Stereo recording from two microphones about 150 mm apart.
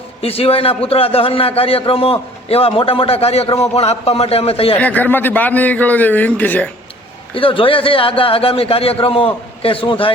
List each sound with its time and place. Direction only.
0.2 s a man's voice: 40° left (ahead or behind)
4.8 s a man's voice: 10° left (ahead or behind)
7.3 s a man's voice: 35° left (ahead or behind)